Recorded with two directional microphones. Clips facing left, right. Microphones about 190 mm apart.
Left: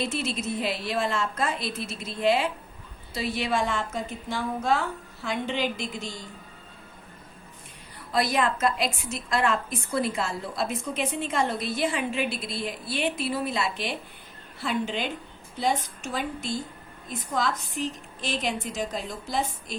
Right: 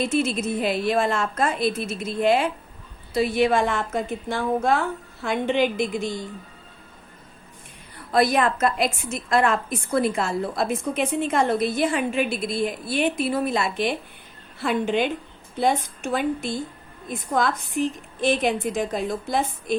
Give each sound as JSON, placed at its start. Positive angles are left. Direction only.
{"t": 0.1, "sound": "a woman's voice", "side_deg": -50}
{"t": 8.1, "sound": "a woman's voice", "side_deg": -50}